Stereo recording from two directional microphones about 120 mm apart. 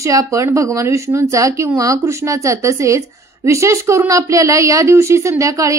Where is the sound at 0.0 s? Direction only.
25° right (ahead or behind).